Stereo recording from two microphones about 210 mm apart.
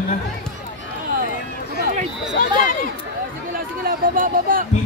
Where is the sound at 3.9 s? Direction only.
40° right (ahead or behind).